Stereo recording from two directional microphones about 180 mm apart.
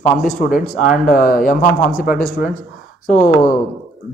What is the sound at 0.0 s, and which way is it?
Speech, 50° left (ahead or behind).